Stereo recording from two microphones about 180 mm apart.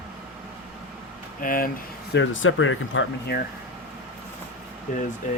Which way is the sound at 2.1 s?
90° left.